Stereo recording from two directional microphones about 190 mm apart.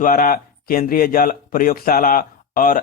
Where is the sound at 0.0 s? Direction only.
50° left (ahead or behind).